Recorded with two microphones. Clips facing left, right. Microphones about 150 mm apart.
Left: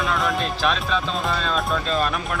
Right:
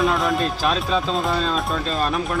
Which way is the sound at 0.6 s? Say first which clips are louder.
Right 1 dB; 35° right (ahead or behind).